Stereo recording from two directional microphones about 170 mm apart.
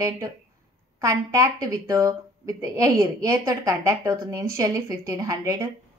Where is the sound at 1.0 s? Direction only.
20° right (ahead or behind).